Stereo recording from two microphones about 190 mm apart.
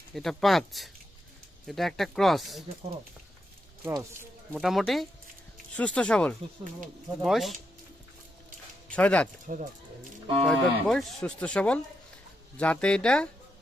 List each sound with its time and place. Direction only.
0.1 s speech: centre (ahead or behind)
3.8 s speech: 10° right (ahead or behind)
4.6 s speech: centre (ahead or behind)
8.9 s speech: 5° left (ahead or behind)
9.5 s cattle: 40° right (ahead or behind)
10.4 s speech: 5° left (ahead or behind)